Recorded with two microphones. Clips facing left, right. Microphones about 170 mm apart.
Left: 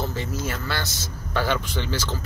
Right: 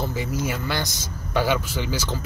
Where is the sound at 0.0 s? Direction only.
10° right (ahead or behind).